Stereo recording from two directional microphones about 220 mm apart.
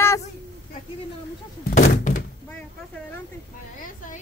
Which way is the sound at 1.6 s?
40° left (ahead or behind).